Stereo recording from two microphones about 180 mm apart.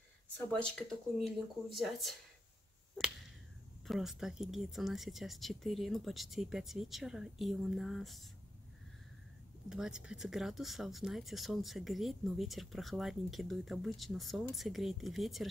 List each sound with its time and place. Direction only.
0.5 s speech: 5° left (ahead or behind)
3.0 s finger snapping: centre (ahead or behind)
3.8 s speech: centre (ahead or behind)
9.7 s speech: 5° right (ahead or behind)